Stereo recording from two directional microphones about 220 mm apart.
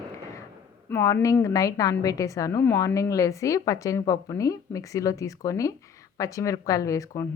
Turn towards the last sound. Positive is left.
turn(degrees=15)  # may be behind; listen again after turning